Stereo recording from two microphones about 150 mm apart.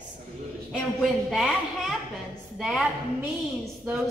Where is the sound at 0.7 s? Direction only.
Centre (ahead or behind).